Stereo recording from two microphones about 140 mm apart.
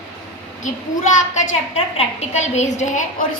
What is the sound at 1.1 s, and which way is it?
A woman's voice, 50° left (ahead or behind).